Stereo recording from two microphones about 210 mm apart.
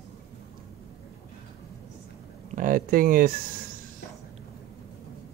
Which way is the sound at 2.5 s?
40° right (ahead or behind).